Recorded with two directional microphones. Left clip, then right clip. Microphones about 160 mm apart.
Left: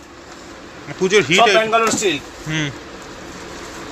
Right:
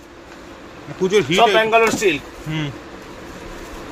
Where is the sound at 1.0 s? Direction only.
5° right (ahead or behind).